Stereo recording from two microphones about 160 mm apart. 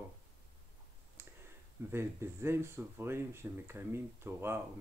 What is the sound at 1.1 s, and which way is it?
Speech, 15° right (ahead or behind).